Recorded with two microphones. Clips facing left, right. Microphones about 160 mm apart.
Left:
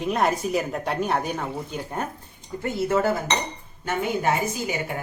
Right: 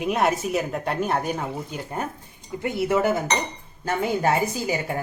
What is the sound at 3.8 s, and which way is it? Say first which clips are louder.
Speech: right 2 dB; 35° right (ahead or behind).